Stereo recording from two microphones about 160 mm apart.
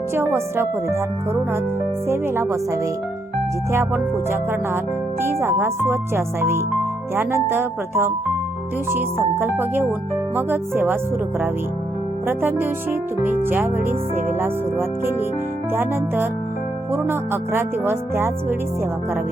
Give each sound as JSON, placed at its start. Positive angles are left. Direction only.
{"t": 0.1, "sound": "music", "side_deg": -15}
{"t": 12.2, "sound": "music", "side_deg": -15}